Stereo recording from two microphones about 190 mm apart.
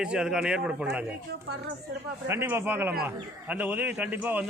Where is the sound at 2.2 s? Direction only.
10° right (ahead or behind).